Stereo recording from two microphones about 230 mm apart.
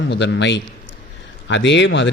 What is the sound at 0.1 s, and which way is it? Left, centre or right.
A man's voice, left.